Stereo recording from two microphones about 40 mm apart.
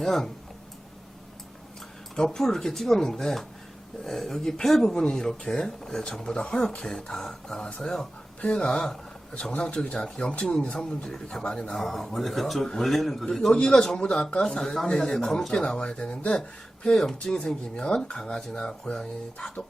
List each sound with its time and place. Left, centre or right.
0.0 s speech: centre
2.1 s speech: centre
8.4 s speech: left; by 13.2 s centre
13.5 s speech: left
14.4 s speech: centre; by 16.4 s left
16.4 s speech: centre